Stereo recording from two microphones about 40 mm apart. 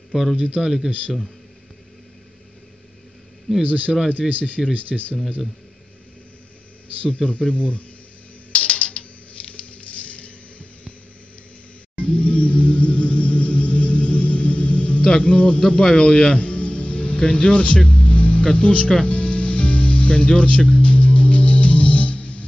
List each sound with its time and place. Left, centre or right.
0.1 s a man's voice: centre
3.6 s a man's voice: right
4.2 s speech: centre
4.7 s a man's voice: right
7.0 s speech: left
8.5 s typing: left
9.8 s a sound: left
12.0 s music: left
15.0 s speech: left
15.8 s music: left